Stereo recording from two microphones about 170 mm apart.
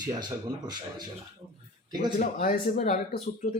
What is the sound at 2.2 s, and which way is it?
Speech, 55° left (ahead or behind).